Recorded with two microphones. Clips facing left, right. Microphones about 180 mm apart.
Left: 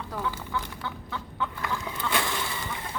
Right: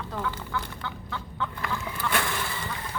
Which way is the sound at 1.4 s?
15° left (ahead or behind).